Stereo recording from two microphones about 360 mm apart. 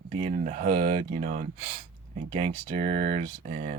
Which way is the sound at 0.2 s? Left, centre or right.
Centre.